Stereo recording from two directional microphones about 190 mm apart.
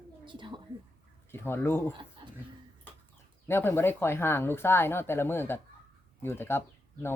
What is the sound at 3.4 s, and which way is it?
Speech, 10° left (ahead or behind).